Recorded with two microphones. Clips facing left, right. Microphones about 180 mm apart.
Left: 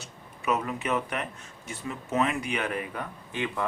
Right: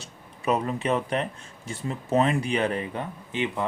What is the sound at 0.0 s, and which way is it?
Speech, 30° right (ahead or behind).